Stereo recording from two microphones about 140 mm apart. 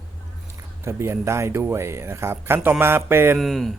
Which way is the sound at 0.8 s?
20° right (ahead or behind).